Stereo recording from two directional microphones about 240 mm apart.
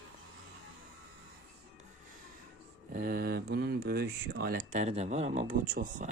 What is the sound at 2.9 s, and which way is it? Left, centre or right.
Speech, right.